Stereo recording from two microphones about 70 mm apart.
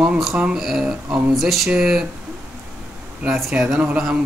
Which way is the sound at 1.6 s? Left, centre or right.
Centre.